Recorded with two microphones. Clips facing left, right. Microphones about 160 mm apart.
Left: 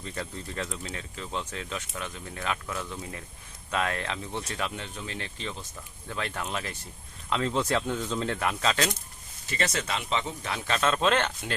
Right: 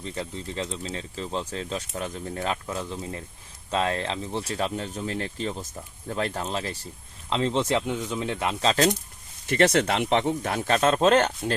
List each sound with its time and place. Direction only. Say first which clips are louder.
0.0 s speech: right 3 dB; 20° right (ahead or behind)
9.5 s speech: right 9 dB; 60° right (ahead or behind); by 11.5 s 40° right (ahead or behind)